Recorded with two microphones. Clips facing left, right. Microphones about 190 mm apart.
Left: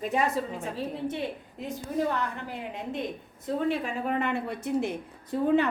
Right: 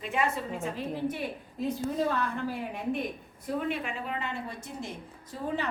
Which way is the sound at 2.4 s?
20° left (ahead or behind).